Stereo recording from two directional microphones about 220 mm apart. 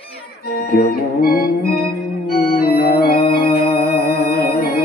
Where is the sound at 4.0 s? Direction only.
45° left (ahead or behind).